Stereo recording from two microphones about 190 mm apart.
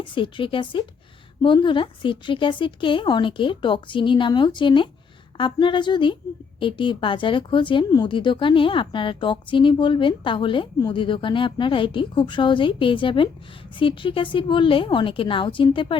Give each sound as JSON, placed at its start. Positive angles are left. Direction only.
{"t": 0.0, "sound": "speech", "side_deg": 25}